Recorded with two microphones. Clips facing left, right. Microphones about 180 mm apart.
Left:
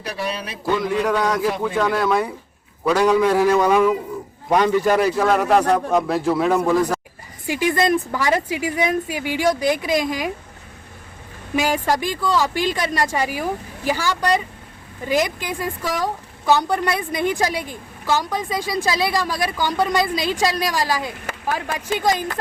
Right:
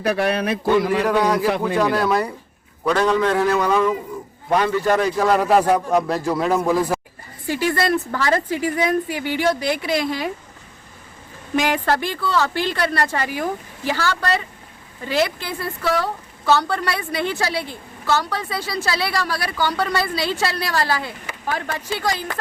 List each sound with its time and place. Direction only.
0.0 s a man's voice: 60° right (ahead or behind)
1.0 s a man's voice: centre (ahead or behind)
7.4 s a woman's voice: 15° left (ahead or behind)
11.5 s a woman's voice: 10° left (ahead or behind)